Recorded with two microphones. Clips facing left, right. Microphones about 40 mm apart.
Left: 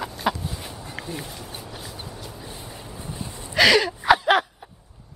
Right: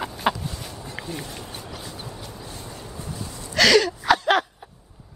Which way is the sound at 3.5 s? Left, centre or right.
Centre.